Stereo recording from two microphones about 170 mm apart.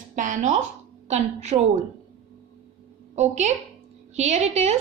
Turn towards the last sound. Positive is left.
turn(degrees=-40)  # may be behind; listen again after turning